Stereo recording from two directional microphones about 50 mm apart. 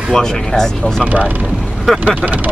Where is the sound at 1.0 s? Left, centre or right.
Right.